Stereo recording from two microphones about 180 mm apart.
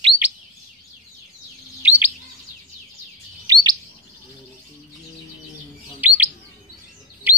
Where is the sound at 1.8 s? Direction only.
10° right (ahead or behind).